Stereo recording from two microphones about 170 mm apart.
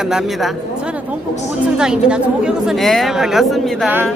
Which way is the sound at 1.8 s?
5° right (ahead or behind).